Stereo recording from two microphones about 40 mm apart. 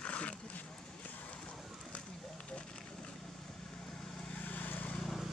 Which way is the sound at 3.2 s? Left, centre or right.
Centre.